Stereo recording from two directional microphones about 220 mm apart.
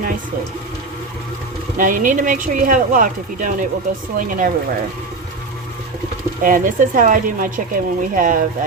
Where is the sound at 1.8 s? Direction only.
35° right (ahead or behind).